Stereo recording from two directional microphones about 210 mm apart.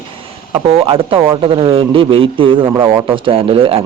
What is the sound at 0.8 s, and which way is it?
Speech, 25° right (ahead or behind).